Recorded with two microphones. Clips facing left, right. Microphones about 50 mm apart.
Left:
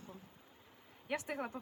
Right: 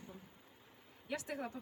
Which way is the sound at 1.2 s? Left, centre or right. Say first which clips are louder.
Left 2 dB; centre.